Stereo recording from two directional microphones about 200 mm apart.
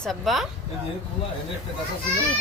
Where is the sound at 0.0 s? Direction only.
Centre (ahead or behind).